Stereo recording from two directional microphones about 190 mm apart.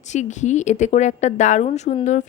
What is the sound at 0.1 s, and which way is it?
Speech, 40° left (ahead or behind).